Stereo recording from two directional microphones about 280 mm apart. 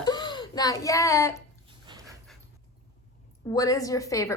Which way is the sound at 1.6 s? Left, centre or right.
Centre.